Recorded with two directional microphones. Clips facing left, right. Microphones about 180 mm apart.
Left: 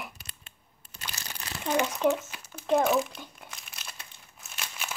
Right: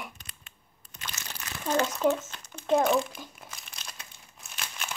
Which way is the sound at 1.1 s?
35° left (ahead or behind).